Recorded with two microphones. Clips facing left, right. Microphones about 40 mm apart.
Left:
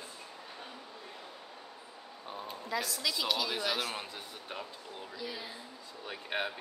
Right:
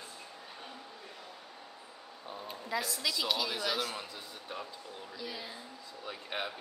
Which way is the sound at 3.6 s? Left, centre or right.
Centre.